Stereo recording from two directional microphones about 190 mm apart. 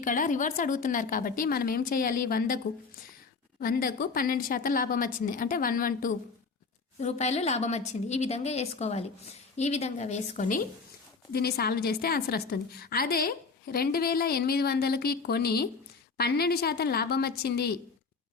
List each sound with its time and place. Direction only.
0.0 s a woman's voice: 45° left (ahead or behind)
3.6 s a woman's voice: 50° left (ahead or behind)
7.0 s a woman's voice: 35° left (ahead or behind)
11.3 s a woman's voice: 55° left (ahead or behind)